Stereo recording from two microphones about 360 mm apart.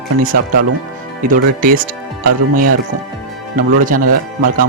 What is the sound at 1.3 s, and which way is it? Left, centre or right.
Speech, right.